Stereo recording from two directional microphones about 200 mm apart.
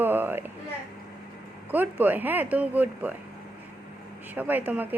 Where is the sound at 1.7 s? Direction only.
10° right (ahead or behind).